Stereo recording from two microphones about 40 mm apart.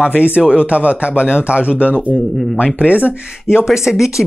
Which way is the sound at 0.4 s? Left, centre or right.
Right.